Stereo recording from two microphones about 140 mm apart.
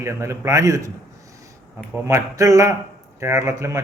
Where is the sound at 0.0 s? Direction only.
20° right (ahead or behind).